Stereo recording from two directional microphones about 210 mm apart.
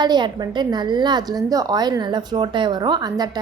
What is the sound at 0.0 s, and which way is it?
A woman's voice, 20° right (ahead or behind).